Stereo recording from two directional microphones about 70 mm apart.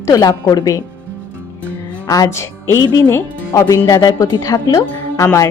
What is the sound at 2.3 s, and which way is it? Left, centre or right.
Speech, left.